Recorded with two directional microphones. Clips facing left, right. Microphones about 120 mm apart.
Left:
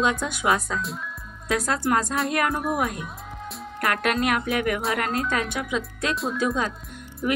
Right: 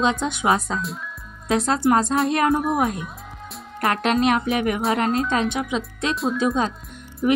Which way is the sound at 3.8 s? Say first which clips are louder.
Right 4 dB; 25° right (ahead or behind).